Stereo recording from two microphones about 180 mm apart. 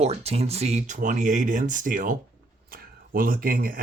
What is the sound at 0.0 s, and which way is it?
Speech, 35° right (ahead or behind).